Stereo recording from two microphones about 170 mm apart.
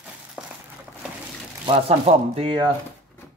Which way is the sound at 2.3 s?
30° right (ahead or behind).